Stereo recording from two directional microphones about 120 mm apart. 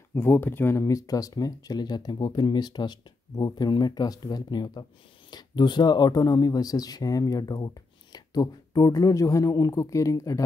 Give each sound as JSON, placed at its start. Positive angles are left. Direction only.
{"t": 0.1, "sound": "speech", "side_deg": 15}